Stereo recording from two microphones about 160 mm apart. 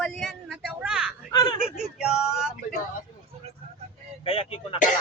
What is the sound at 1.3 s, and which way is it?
Speech, 25° left (ahead or behind).